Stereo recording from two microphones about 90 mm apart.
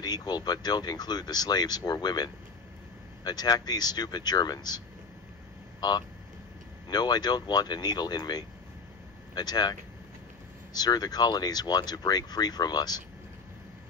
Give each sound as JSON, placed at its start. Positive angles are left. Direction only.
{"t": 0.0, "sound": "speech", "side_deg": 50}